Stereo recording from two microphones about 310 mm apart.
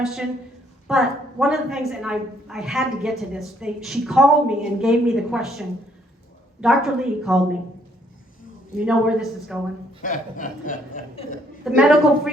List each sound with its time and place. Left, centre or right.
0.0 s a woman's voice: centre
8.7 s a woman's voice: centre
10.0 s speech: left
11.8 s a woman's voice: centre